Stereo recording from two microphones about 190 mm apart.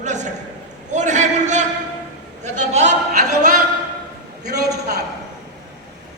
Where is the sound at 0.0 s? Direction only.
40° right (ahead or behind).